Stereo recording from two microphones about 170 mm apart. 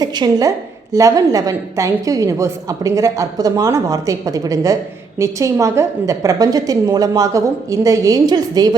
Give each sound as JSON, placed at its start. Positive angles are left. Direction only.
{"t": 0.0, "sound": "a woman's voice", "side_deg": -20}